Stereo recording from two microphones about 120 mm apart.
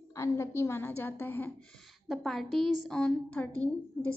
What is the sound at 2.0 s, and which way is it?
A woman's voice, centre (ahead or behind).